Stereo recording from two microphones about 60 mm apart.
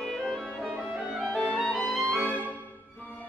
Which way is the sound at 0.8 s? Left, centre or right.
Centre.